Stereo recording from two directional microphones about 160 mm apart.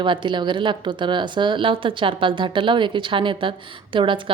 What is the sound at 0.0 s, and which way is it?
A woman's voice, 30° right (ahead or behind).